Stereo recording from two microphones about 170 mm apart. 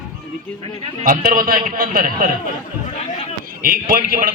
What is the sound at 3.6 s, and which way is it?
Speech, 55° right (ahead or behind).